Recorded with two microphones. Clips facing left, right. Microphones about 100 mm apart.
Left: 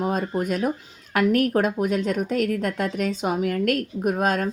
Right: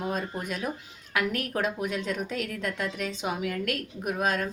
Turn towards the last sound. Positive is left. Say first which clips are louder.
# left 6 dB
turn(degrees=45)  # may be behind; listen again after turning